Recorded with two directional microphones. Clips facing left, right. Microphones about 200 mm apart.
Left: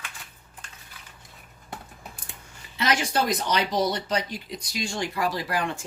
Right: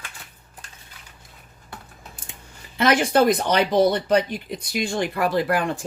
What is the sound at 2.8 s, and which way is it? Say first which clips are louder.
Speech: right 7 dB; 55° right (ahead or behind).